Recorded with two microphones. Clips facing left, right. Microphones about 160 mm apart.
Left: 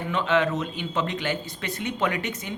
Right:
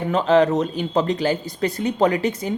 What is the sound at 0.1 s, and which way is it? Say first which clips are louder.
A woman's voice: right 7 dB; 40° right (ahead or behind).